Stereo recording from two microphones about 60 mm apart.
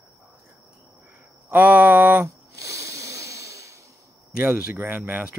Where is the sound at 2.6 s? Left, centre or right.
Right.